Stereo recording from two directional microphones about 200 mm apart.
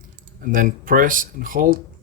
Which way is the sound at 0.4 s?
40° right (ahead or behind).